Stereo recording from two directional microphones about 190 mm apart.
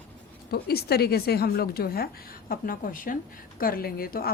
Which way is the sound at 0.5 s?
55° left (ahead or behind).